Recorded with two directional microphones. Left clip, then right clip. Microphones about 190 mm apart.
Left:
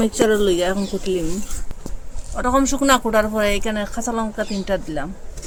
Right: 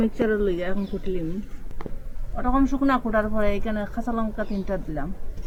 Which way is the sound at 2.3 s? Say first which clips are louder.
Left 5 dB; 90° left.